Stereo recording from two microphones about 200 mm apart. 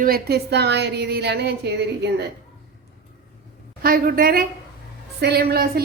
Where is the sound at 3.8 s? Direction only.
45° right (ahead or behind).